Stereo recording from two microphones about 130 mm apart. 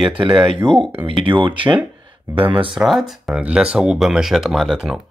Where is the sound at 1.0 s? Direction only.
40° right (ahead or behind).